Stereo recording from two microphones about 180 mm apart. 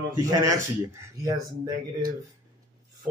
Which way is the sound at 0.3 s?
20° right (ahead or behind).